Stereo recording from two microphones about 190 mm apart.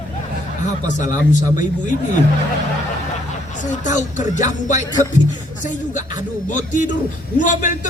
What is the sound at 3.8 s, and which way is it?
Speech, 40° left (ahead or behind).